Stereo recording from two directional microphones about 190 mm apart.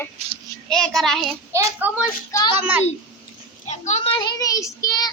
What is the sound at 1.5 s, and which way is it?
Speech, 10° right (ahead or behind).